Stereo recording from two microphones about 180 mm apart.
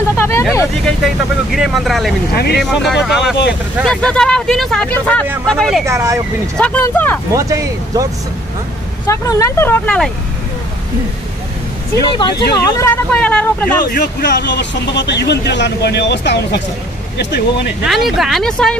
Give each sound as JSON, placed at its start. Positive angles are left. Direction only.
{"t": 0.2, "sound": "speech", "side_deg": 15}
{"t": 0.8, "sound": "speech", "side_deg": 0}
{"t": 2.3, "sound": "speech", "side_deg": 65}
{"t": 2.6, "sound": "speech", "side_deg": 0}
{"t": 5.9, "sound": "speech", "side_deg": -15}
{"t": 6.5, "sound": "speech", "side_deg": 5}
{"t": 7.3, "sound": "speech", "side_deg": -20}
{"t": 9.0, "sound": "speech", "side_deg": 20}
{"t": 12.1, "sound": "speech", "side_deg": 20}
{"t": 13.8, "sound": "speech", "side_deg": 65}
{"t": 17.8, "sound": "speech", "side_deg": 0}